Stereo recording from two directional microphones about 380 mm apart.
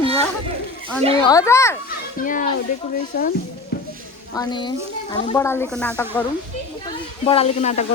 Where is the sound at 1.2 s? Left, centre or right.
Centre.